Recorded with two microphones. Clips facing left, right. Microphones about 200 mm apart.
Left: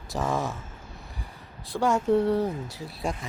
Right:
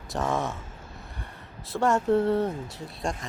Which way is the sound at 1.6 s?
Centre (ahead or behind).